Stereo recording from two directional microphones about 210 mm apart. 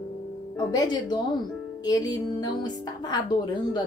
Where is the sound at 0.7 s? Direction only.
20° left (ahead or behind).